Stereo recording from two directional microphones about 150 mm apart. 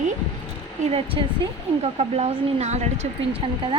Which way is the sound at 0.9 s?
40° right (ahead or behind).